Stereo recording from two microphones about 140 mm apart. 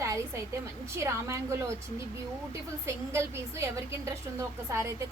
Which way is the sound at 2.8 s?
20° right (ahead or behind).